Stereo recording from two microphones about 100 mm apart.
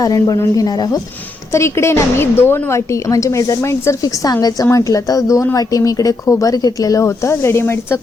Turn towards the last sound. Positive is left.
turn(degrees=25)  # may be behind; listen again after turning